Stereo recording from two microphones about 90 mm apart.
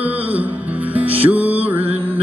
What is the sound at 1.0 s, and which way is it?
Music, 90° right.